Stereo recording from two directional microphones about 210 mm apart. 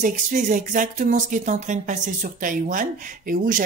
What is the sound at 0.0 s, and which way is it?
Speech, 35° right (ahead or behind).